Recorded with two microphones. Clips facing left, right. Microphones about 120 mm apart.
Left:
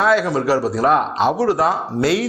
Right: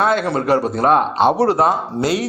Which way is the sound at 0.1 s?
55° right (ahead or behind).